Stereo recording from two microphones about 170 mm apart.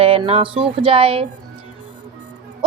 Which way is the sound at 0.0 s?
35° right (ahead or behind).